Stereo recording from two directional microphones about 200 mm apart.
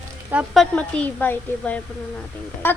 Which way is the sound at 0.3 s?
5° right (ahead or behind).